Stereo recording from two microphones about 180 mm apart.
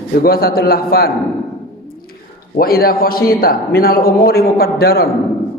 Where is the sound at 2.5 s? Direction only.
55° left (ahead or behind).